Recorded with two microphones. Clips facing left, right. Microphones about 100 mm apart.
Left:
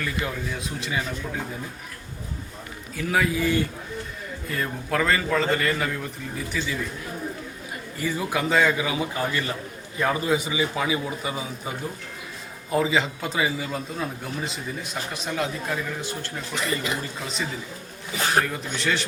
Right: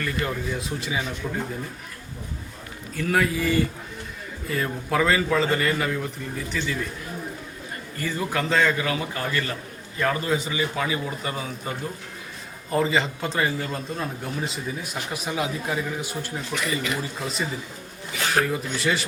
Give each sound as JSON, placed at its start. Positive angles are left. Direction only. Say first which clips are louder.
{"t": 0.0, "sound": "a man's voice", "louder": "right 2 dB", "side_deg": 0}
{"t": 2.9, "sound": "a man's voice", "louder": "right 1 dB", "side_deg": 0}
{"t": 7.9, "sound": "a man's voice", "louder": "left 1 dB", "side_deg": 10}